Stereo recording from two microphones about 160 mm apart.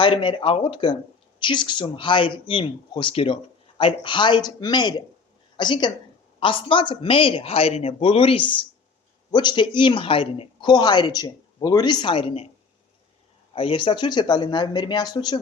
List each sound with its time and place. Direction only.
0.0 s speech: 30° left (ahead or behind)
13.5 s speech: 35° left (ahead or behind)